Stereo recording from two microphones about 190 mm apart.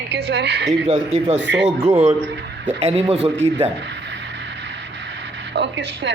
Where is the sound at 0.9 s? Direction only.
35° right (ahead or behind).